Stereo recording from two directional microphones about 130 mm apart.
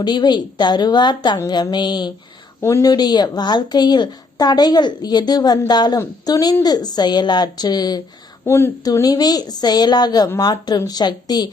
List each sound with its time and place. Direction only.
0.0 s a woman's voice: 35° left (ahead or behind)
2.6 s a woman's voice: 20° left (ahead or behind)
8.4 s speech: 15° left (ahead or behind)
8.8 s a woman's voice: 30° left (ahead or behind)